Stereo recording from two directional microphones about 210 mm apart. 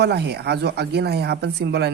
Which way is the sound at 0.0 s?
50° right (ahead or behind).